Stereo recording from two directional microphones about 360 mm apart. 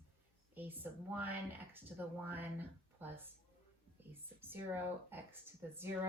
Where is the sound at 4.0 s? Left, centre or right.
Centre.